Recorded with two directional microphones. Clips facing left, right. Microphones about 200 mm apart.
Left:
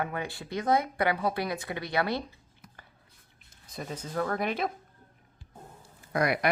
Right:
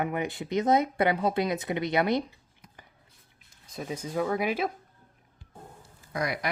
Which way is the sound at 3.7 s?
10° right (ahead or behind).